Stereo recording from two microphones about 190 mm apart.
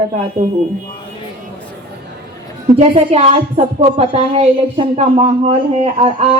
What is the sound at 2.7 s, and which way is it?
A woman's voice, 30° right (ahead or behind).